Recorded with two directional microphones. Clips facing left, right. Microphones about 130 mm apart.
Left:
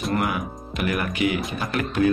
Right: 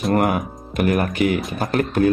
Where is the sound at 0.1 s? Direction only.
45° right (ahead or behind).